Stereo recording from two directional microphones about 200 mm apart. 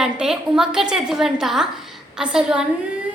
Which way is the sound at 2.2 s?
5° right (ahead or behind).